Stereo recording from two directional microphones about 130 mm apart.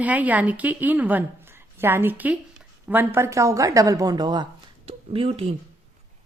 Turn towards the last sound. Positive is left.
turn(degrees=-45)  # may be behind; listen again after turning